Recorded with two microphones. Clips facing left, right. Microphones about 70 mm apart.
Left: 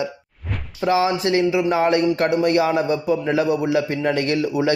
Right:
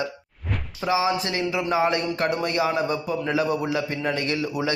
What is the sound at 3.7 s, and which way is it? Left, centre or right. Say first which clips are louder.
Speech: left 6 dB; left.